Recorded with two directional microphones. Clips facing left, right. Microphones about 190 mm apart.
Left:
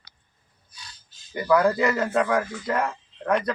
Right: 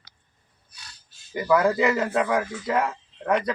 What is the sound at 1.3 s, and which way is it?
A man's voice, 5° right (ahead or behind).